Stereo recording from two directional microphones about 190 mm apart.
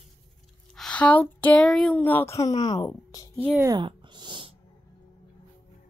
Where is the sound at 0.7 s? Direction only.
5° left (ahead or behind); by 3.3 s 20° left (ahead or behind).